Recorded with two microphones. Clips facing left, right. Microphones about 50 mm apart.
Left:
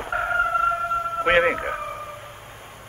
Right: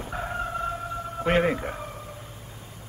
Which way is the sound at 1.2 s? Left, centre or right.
Left.